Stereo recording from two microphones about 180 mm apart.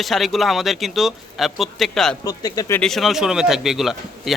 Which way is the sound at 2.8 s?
Centre (ahead or behind).